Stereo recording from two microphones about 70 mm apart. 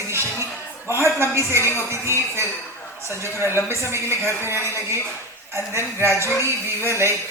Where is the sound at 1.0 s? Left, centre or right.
Right.